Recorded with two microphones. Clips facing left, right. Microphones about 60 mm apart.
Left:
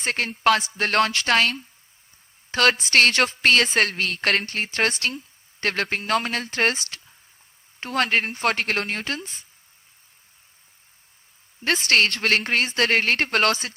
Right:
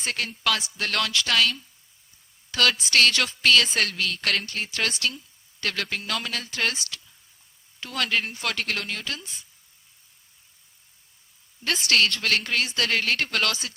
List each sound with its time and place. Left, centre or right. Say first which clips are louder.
0.0 s a woman's voice: left 6 dB; left
11.6 s a woman's voice: left 3 dB; left